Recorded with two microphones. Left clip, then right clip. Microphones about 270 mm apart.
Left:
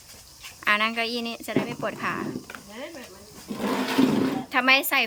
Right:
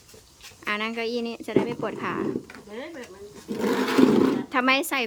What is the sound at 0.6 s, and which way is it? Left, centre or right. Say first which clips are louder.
A woman's voice: left 5 dB; centre.